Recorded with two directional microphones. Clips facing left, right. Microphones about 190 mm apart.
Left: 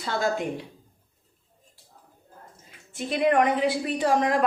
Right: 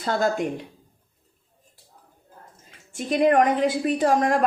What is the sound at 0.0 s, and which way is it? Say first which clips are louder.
Speech: right 3 dB; 45° right (ahead or behind).